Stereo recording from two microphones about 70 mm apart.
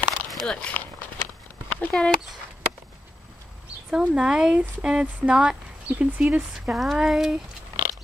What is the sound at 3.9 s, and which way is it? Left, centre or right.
Speech, centre.